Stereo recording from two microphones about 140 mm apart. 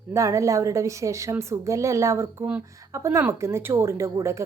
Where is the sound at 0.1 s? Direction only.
20° right (ahead or behind).